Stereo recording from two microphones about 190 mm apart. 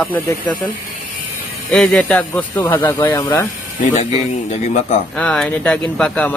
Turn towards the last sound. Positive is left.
turn(degrees=5)  # may be behind; listen again after turning